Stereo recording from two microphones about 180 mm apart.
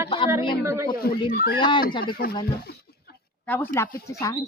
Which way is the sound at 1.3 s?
55° left (ahead or behind).